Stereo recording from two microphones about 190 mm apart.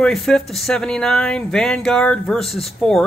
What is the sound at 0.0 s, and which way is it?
Speech, centre (ahead or behind).